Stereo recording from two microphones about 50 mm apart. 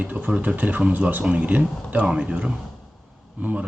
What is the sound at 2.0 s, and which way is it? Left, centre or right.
Speech, right.